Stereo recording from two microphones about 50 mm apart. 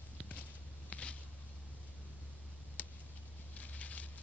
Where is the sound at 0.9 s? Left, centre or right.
Left.